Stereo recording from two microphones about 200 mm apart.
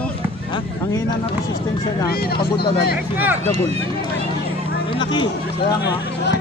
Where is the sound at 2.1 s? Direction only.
50° left (ahead or behind).